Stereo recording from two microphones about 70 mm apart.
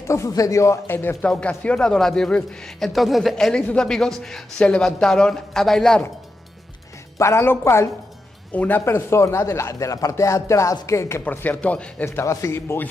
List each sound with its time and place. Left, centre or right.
0.3 s speech: left
0.8 s speech: left
1.2 s a man's voice: centre
2.9 s a woman's voice: centre
7.2 s speech: left
8.5 s speech: left
11.2 s speech: left
12.0 s speech: left